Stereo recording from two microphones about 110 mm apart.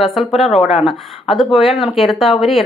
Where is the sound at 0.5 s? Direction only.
70° left (ahead or behind).